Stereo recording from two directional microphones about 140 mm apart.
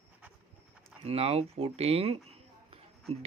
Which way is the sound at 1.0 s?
45° right (ahead or behind).